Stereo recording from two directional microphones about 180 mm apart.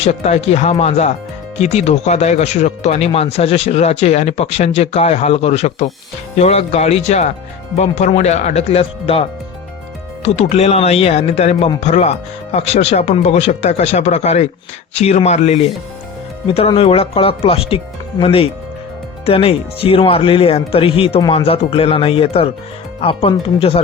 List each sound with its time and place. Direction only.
0.0 s speech: 35° left (ahead or behind)
10.2 s speech: 35° left (ahead or behind)